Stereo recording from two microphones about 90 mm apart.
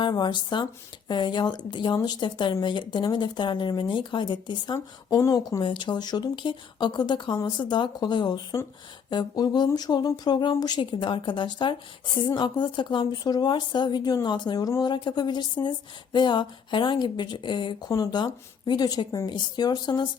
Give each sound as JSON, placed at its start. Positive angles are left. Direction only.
{"t": 0.0, "sound": "speech", "side_deg": 55}
{"t": 4.7, "sound": "speech", "side_deg": 40}
{"t": 5.6, "sound": "speech", "side_deg": 60}
{"t": 10.8, "sound": "speech", "side_deg": 65}
{"t": 17.8, "sound": "speech", "side_deg": 40}
{"t": 18.1, "sound": "speech", "side_deg": 55}